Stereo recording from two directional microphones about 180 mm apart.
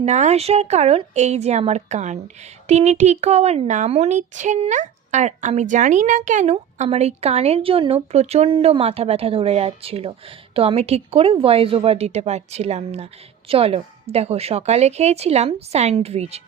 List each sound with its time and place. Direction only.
0.0 s speech: 40° right (ahead or behind)